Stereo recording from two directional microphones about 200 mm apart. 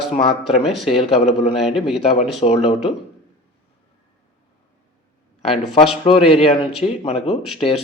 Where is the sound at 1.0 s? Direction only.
30° left (ahead or behind).